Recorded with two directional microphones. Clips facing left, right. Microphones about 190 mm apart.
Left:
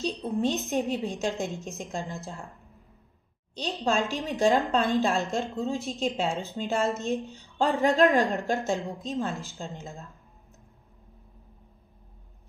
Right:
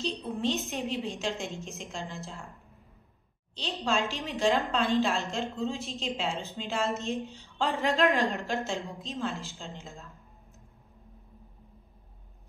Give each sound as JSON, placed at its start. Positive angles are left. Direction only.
{"t": 0.4, "sound": "a woman's voice", "side_deg": 45}
{"t": 3.8, "sound": "a woman's voice", "side_deg": 50}